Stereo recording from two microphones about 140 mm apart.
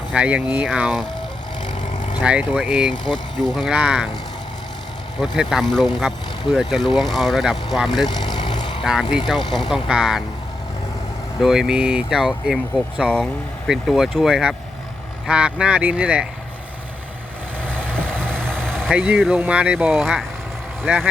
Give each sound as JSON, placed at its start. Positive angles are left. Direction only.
{"t": 0.1, "sound": "speech", "side_deg": -10}
{"t": 1.8, "sound": "vehicle", "side_deg": 60}
{"t": 2.2, "sound": "speech", "side_deg": -10}
{"t": 5.2, "sound": "speech", "side_deg": 0}
{"t": 8.1, "sound": "vehicle", "side_deg": 30}
{"t": 8.8, "sound": "speech", "side_deg": 0}
{"t": 11.3, "sound": "speech", "side_deg": -5}
{"t": 17.7, "sound": "vehicle", "side_deg": -15}
{"t": 18.6, "sound": "vehicle", "side_deg": 5}
{"t": 18.9, "sound": "speech", "side_deg": -10}